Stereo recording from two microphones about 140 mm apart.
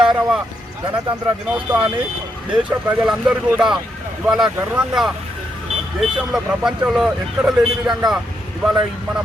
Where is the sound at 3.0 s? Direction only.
5° right (ahead or behind).